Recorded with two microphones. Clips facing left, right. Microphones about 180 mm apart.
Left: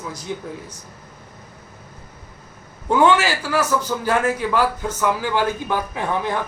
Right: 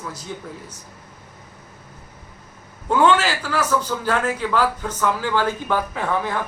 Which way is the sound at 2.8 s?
15° left (ahead or behind).